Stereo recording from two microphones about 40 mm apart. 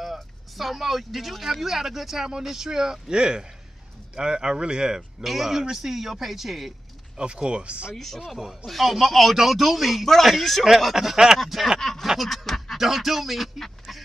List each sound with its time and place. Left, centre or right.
0.0 s a man's voice: centre
5.2 s a man's voice: centre
7.2 s a man's voice: right
7.9 s speech: centre
11.8 s a sound: centre
12.1 s speech: centre